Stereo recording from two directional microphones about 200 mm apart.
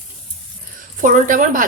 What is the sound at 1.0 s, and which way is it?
Speech, 40° right (ahead or behind).